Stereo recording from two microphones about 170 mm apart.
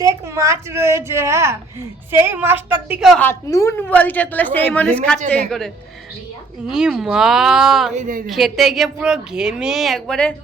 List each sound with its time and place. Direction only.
0.0 s a woman's voice: 20° right (ahead or behind)
3.2 s a woman's voice: 15° left (ahead or behind); by 7.9 s centre (ahead or behind)
7.9 s a woman's voice: 50° right (ahead or behind)
8.3 s speech: centre (ahead or behind)